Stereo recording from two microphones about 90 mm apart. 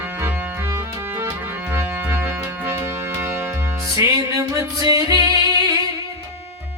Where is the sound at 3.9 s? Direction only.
40° right (ahead or behind).